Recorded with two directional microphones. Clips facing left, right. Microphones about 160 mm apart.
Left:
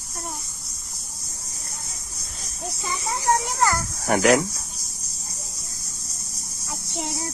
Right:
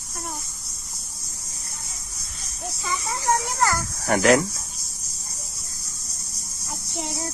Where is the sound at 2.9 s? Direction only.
30° left (ahead or behind).